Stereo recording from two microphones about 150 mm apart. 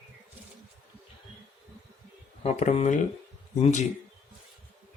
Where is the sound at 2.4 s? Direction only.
45° left (ahead or behind).